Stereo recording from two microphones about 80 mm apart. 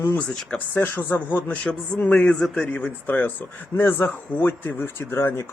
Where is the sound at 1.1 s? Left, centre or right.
Left.